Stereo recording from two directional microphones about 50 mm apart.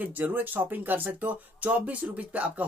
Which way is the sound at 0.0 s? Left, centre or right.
Right.